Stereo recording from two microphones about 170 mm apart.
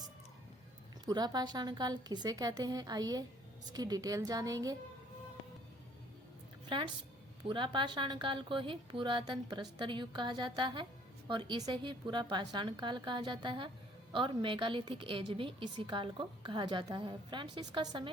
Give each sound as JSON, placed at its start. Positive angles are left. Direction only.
{"t": 1.0, "sound": "a woman's voice", "side_deg": -25}
{"t": 6.7, "sound": "a woman's voice", "side_deg": -30}